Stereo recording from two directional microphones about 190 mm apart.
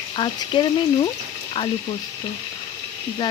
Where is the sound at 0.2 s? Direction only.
25° left (ahead or behind).